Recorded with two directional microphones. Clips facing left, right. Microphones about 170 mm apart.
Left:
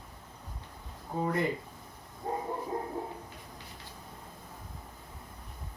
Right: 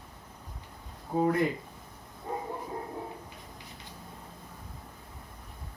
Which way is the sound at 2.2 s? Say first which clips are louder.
Left 1 dB; 45° left (ahead or behind).